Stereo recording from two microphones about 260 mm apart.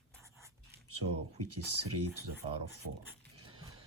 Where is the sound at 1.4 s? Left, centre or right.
Right.